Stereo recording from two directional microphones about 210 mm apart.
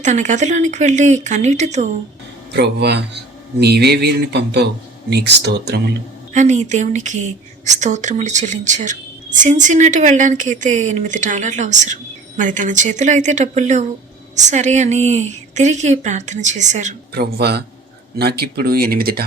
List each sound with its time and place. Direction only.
0.0 s a woman's voice: 35° right (ahead or behind)
2.5 s speech: 55° right (ahead or behind)
6.3 s a woman's voice: 35° right (ahead or behind)
17.2 s speech: 50° right (ahead or behind)